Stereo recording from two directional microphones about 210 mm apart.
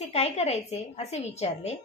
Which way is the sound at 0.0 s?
30° left (ahead or behind).